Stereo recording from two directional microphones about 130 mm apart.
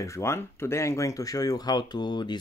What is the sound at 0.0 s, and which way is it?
Speech, 20° left (ahead or behind).